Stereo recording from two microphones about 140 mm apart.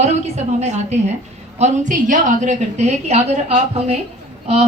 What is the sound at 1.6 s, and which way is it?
A woman's voice, 65° right (ahead or behind).